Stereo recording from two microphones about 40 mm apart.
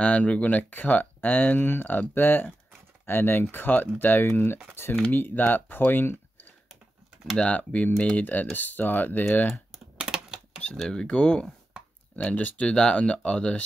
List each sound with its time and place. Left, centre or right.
0.0 s speech: left
5.1 s speech: left
7.3 s speech: left
9.9 s typing: right
10.8 s speech: centre